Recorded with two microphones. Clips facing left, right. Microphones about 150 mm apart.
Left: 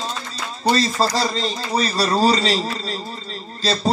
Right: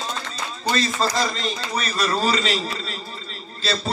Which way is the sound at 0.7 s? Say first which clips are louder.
Even; 35° left (ahead or behind).